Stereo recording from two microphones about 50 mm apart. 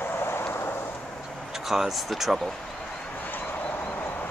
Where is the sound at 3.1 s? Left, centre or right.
Left.